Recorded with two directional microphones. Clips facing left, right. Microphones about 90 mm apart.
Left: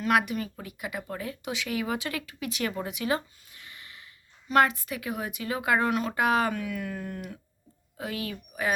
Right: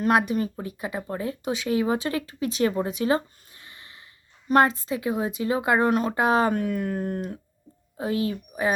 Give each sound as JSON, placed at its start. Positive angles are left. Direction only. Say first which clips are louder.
{"t": 0.1, "sound": "speech", "louder": "right 2 dB", "side_deg": -30}
{"t": 6.5, "sound": "speech", "louder": "right 7 dB", "side_deg": -40}